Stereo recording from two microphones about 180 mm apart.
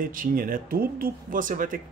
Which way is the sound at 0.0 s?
50° right (ahead or behind).